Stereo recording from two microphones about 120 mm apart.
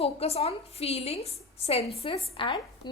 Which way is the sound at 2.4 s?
40° left (ahead or behind).